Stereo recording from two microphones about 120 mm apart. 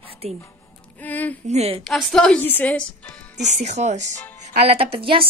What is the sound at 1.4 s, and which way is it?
Speech, 65° right (ahead or behind).